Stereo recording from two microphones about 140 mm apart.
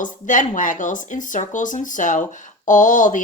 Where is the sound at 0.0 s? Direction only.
70° left (ahead or behind).